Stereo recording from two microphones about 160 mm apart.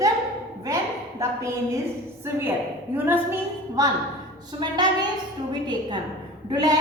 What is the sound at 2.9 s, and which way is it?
Speech, 15° right (ahead or behind).